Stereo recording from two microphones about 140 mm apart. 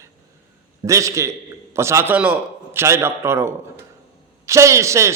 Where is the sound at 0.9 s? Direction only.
20° right (ahead or behind).